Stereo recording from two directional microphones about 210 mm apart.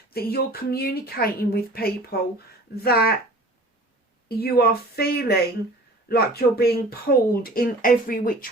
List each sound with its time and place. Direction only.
0.1 s speech: 45° left (ahead or behind)
4.3 s speech: 45° left (ahead or behind)